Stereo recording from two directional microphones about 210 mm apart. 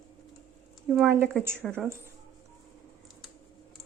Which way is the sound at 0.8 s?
Centre (ahead or behind).